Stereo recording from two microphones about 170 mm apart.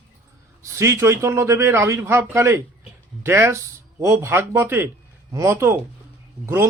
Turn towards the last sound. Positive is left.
turn(degrees=-15)  # may be behind; listen again after turning